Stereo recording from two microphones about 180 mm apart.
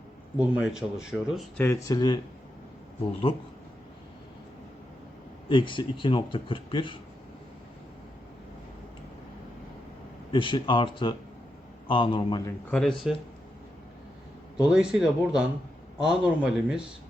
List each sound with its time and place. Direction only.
0.3 s speech: 5° right (ahead or behind)
1.5 s a man's voice: 15° left (ahead or behind)
5.5 s a man's voice: 25° left (ahead or behind)
10.3 s a man's voice: 25° left (ahead or behind)
12.7 s speech: 5° left (ahead or behind)
14.6 s speech: 5° right (ahead or behind)